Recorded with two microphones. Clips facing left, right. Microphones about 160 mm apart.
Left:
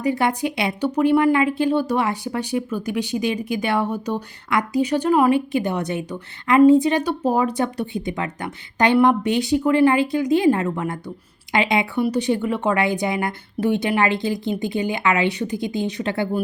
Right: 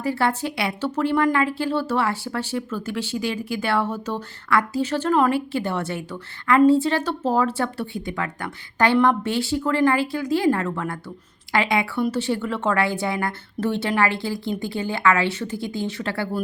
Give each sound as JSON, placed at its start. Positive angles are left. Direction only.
{"t": 0.0, "sound": "speech", "side_deg": 15}